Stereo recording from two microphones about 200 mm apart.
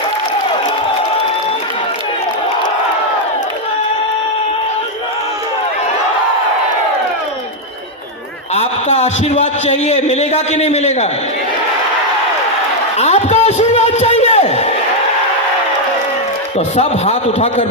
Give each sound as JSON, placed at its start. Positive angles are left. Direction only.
{"t": 8.5, "sound": "a man's voice", "side_deg": 30}
{"t": 13.0, "sound": "a sound", "side_deg": 35}
{"t": 16.6, "sound": "a man's voice", "side_deg": 35}